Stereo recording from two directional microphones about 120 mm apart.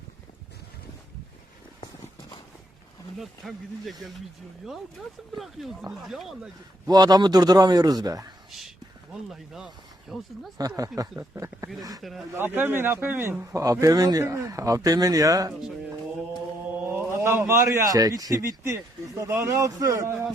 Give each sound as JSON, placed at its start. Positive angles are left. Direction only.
{"t": 3.2, "sound": "speech", "side_deg": 0}
{"t": 6.8, "sound": "a man's voice", "side_deg": -35}
{"t": 8.4, "sound": "speech", "side_deg": 0}
{"t": 10.6, "sound": "a man's voice", "side_deg": -30}
{"t": 12.4, "sound": "speech", "side_deg": -15}
{"t": 17.1, "sound": "speech", "side_deg": -20}